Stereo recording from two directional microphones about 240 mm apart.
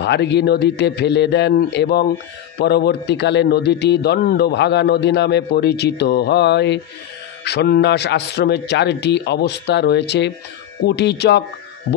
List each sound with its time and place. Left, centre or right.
0.0 s a man's voice: left